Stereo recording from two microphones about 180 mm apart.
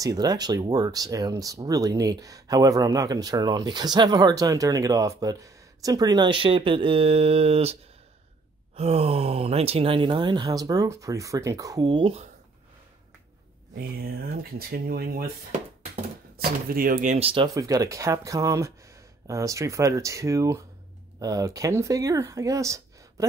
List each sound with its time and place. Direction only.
0.0 s speech: 20° right (ahead or behind)
8.7 s speech: 35° right (ahead or behind)
13.7 s speech: 60° right (ahead or behind)
16.3 s speech: 55° right (ahead or behind); by 17.5 s 30° right (ahead or behind)
17.6 s speech: 20° right (ahead or behind)